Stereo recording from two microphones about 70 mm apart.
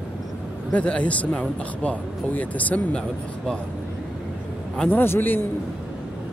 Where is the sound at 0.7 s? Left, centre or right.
Centre.